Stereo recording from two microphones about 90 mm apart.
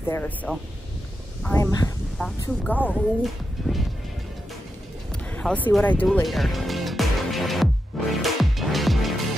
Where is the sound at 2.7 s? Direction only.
20° left (ahead or behind).